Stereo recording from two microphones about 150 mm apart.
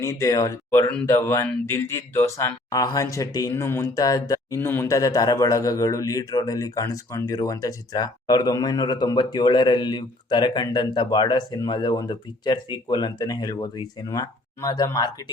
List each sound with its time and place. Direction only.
0.0 s speech: 20° left (ahead or behind)